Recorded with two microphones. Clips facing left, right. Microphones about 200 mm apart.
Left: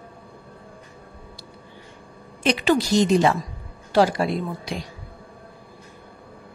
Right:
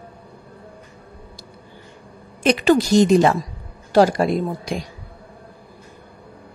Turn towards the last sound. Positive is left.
turn(degrees=-45)  # may be behind; listen again after turning